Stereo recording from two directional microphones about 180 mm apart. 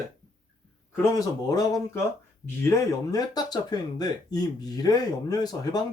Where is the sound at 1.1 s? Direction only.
20° left (ahead or behind).